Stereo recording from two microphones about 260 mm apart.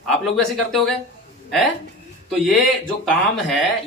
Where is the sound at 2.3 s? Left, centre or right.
Centre.